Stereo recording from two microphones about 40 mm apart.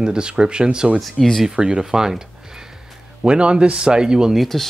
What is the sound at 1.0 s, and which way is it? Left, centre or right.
Speech, centre.